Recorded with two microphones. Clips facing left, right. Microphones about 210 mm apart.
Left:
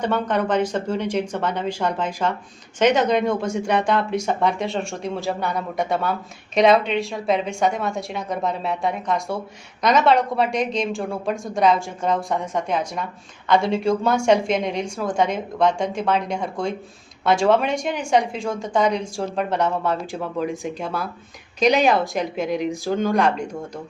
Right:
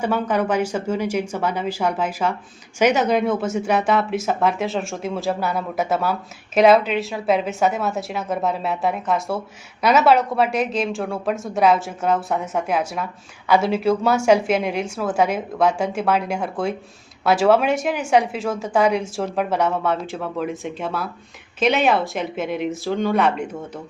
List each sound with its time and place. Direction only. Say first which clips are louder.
0.0 s a woman's voice: right 1 dB; 10° right (ahead or behind)